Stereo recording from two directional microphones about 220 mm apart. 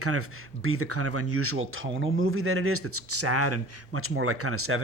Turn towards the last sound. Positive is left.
turn(degrees=-75)  # may be behind; listen again after turning